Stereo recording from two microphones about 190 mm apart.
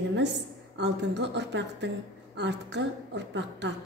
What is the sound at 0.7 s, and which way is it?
A woman's voice, 65° right (ahead or behind).